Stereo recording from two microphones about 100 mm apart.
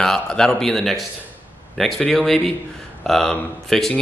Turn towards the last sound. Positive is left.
turn(degrees=5)  # may be behind; listen again after turning